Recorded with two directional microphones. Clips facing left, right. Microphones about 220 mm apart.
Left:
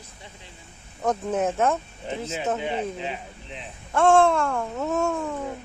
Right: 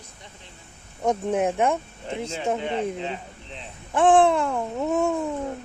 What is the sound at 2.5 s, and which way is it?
Speech, 5° left (ahead or behind).